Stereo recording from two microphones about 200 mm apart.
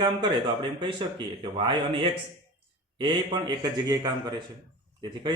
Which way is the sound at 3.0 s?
20° right (ahead or behind).